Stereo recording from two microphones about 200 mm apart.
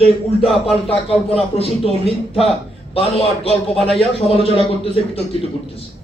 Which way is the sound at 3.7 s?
Centre (ahead or behind).